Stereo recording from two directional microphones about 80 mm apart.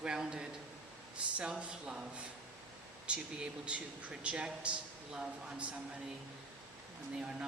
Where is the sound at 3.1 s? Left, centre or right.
Centre.